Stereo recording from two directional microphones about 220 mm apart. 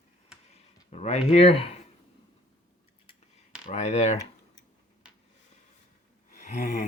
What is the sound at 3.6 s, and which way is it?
Speech, 30° left (ahead or behind).